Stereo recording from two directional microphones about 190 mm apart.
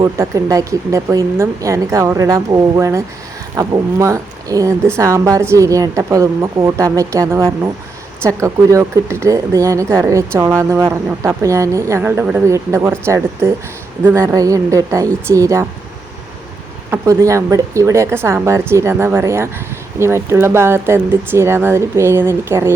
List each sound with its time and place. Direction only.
0.0 s speech: 15° right (ahead or behind)
16.9 s speech: 15° right (ahead or behind)